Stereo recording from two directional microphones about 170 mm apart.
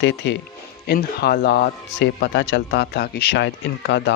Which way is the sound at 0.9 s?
70° left (ahead or behind).